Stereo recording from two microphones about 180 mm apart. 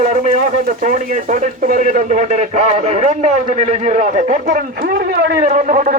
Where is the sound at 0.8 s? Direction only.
45° right (ahead or behind).